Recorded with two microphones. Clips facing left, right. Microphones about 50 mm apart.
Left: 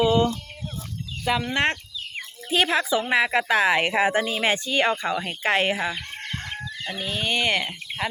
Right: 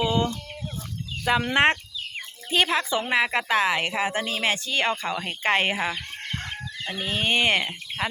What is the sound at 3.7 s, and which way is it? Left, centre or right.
Speech, left.